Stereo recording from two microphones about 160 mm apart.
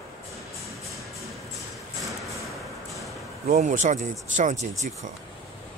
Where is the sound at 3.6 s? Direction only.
50° right (ahead or behind).